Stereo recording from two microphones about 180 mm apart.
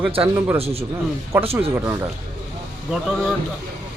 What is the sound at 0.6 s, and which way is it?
Speech, 35° right (ahead or behind).